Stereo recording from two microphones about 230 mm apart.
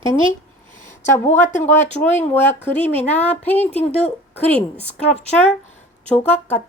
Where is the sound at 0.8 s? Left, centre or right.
Left.